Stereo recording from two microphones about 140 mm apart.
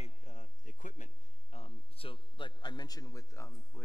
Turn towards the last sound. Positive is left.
turn(degrees=20)  # may be behind; listen again after turning